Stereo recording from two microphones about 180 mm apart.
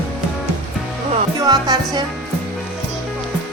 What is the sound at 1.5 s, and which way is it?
Speech, 20° right (ahead or behind).